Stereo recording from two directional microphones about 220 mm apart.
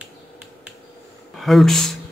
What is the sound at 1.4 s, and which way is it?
Speech, centre (ahead or behind).